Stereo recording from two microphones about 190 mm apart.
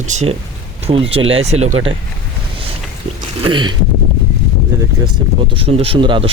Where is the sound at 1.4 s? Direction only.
35° right (ahead or behind).